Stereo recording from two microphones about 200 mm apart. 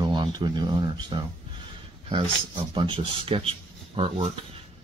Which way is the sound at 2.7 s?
25° right (ahead or behind).